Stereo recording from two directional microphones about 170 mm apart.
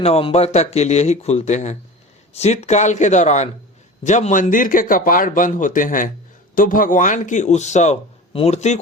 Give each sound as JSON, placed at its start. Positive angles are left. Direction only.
{"t": 0.0, "sound": "a man's voice", "side_deg": 35}